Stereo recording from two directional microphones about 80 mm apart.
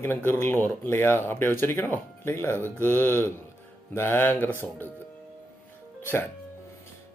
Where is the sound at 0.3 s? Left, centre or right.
Left.